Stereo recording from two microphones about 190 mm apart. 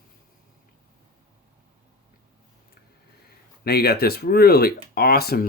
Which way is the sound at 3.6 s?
55° left (ahead or behind).